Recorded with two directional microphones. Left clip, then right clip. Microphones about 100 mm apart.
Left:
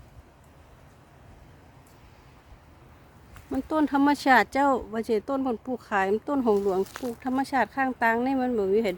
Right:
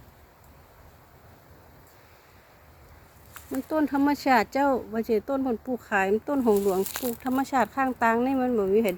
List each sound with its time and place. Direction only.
3.5 s speech: 35° left (ahead or behind)
4.4 s speech: 20° left (ahead or behind)
7.2 s speech: 10° left (ahead or behind)